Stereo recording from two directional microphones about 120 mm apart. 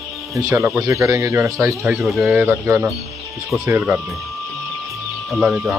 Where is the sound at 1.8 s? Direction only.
Centre (ahead or behind).